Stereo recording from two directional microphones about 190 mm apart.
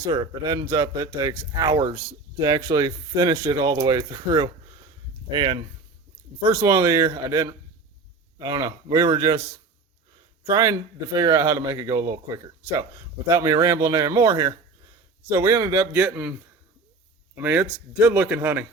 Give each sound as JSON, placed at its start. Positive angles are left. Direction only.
{"t": 0.1, "sound": "speech", "side_deg": -20}
{"t": 6.4, "sound": "speech", "side_deg": -10}
{"t": 10.4, "sound": "speech", "side_deg": -15}
{"t": 17.3, "sound": "speech", "side_deg": -10}